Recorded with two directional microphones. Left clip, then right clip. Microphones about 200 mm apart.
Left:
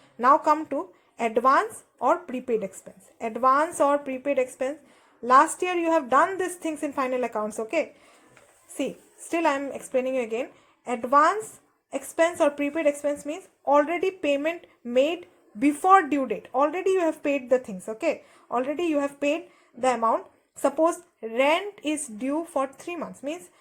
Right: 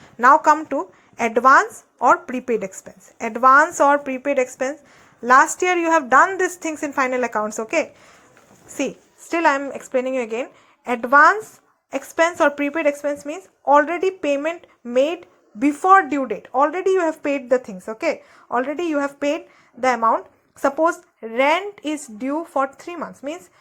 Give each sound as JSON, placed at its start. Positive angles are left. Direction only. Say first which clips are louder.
{"t": 0.2, "sound": "speech", "louder": "right 6 dB", "side_deg": -15}
{"t": 9.3, "sound": "speech", "louder": "right 6 dB", "side_deg": -15}